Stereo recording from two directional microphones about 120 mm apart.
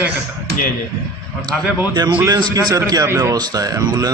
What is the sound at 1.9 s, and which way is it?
Speech, 40° right (ahead or behind).